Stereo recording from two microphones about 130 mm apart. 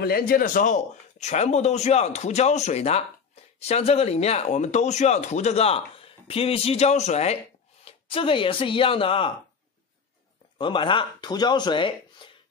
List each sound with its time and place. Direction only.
0.4 s a man's voice: 80° left; by 7.3 s 55° left (ahead or behind)
7.8 s speech: 45° left (ahead or behind)
10.6 s speech: 40° left (ahead or behind)